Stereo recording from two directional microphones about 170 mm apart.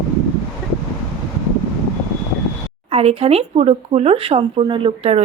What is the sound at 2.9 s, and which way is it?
Speech, 35° right (ahead or behind).